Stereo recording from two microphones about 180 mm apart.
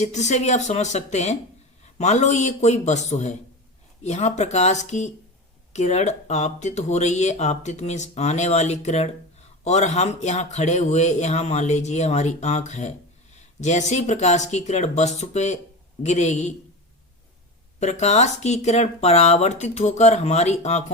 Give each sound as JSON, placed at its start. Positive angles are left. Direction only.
{"t": 0.0, "sound": "speech", "side_deg": 40}
{"t": 17.7, "sound": "speech", "side_deg": 40}